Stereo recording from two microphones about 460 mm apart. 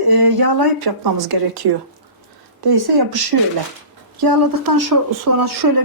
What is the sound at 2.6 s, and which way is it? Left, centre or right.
Speech, right.